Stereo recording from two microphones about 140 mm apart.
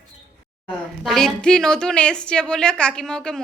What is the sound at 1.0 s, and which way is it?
A woman's voice, 5° left (ahead or behind).